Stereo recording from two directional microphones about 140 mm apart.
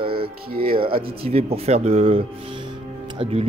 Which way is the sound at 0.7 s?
40° right (ahead or behind).